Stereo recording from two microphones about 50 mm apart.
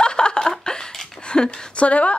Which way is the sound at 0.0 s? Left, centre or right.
Centre.